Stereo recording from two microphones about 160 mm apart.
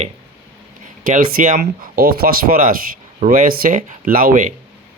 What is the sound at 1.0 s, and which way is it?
Speech, 55° right (ahead or behind).